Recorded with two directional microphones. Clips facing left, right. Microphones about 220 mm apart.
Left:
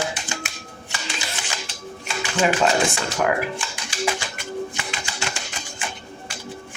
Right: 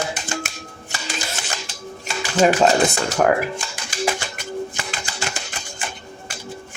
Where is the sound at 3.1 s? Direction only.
45° right (ahead or behind).